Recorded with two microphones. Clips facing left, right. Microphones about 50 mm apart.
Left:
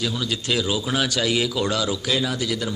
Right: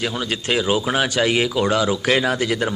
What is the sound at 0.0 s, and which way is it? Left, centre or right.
Speech, right.